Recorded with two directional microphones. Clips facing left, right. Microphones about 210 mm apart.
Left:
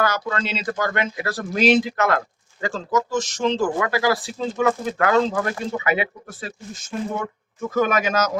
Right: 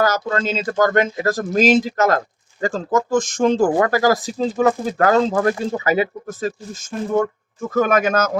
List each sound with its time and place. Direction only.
0.0 s speech: 40° right (ahead or behind)